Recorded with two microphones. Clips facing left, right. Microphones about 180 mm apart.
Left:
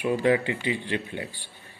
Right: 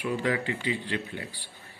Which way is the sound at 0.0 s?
25° left (ahead or behind).